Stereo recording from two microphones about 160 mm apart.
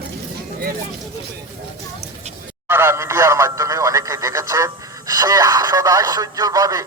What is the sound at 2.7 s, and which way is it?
Radio, 15° right (ahead or behind).